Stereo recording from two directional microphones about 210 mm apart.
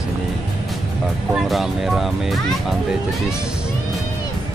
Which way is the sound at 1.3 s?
Centre (ahead or behind).